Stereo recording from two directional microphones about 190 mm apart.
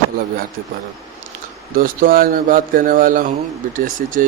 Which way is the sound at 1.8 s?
50° right (ahead or behind).